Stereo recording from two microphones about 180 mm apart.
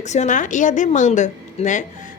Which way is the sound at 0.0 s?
40° left (ahead or behind).